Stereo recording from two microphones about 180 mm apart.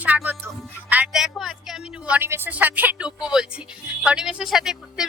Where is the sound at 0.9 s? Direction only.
5° right (ahead or behind).